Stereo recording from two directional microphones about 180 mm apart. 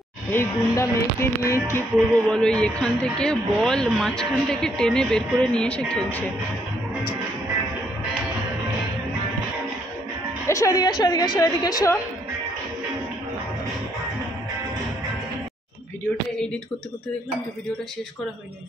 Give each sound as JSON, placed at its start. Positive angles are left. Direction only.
{"t": 0.3, "sound": "music", "side_deg": 15}
{"t": 2.2, "sound": "a man's voice", "side_deg": 5}
{"t": 10.4, "sound": "a woman's voice", "side_deg": 20}